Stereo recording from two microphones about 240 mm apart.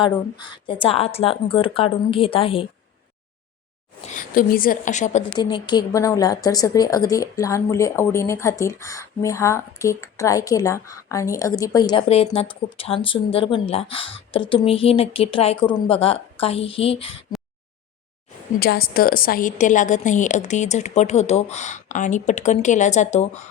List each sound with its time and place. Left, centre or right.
0.0 s a woman's voice: left
4.0 s a woman's voice: left
5.4 s a woman's voice: centre
18.6 s a woman's voice: left